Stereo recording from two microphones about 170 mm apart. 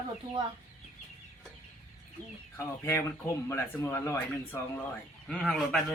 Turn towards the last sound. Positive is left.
turn(degrees=0)  # may be behind; listen again after turning